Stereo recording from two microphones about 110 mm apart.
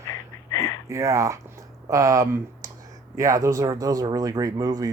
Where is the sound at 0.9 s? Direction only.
30° right (ahead or behind).